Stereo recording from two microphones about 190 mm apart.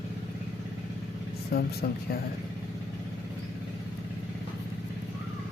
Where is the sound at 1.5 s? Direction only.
55° left (ahead or behind).